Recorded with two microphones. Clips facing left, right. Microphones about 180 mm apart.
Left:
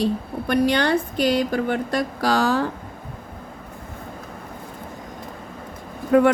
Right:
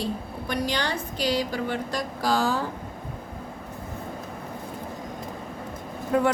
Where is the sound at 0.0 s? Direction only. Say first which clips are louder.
Left 7 dB; 60° left (ahead or behind).